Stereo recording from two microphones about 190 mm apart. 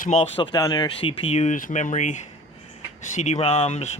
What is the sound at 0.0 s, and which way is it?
Speech, 35° left (ahead or behind).